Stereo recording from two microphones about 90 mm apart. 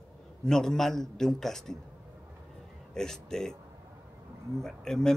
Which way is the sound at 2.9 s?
5° left (ahead or behind).